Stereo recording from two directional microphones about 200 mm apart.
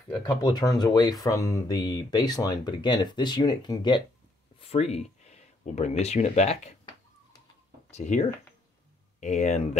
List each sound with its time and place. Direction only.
0.4 s speech: 20° left (ahead or behind)
7.9 s speech: 35° left (ahead or behind)